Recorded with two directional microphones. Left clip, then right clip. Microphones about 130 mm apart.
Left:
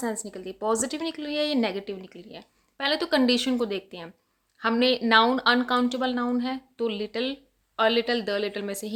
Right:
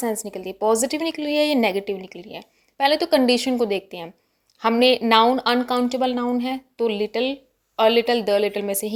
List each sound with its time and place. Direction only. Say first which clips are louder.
0.0 s speech: right 6 dB; 30° right (ahead or behind)
3.7 s speech: right 7 dB; 30° right (ahead or behind)